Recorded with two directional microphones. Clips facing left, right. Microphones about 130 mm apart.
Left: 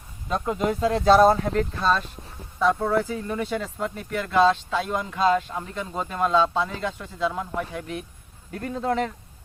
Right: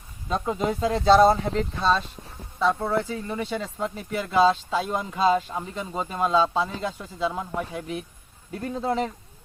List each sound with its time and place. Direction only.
0.3 s speech: centre (ahead or behind)